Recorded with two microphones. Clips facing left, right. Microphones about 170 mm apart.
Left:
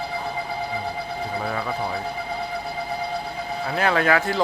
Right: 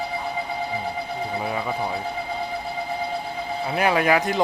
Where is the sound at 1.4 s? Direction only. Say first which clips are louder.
Even; 15° right (ahead or behind).